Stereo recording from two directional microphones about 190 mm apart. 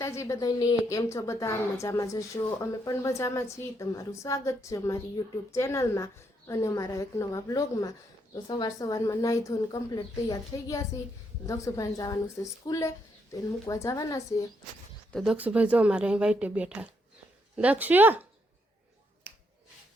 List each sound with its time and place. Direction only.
0.0 s a woman's voice: 15° left (ahead or behind)
15.1 s speech: centre (ahead or behind)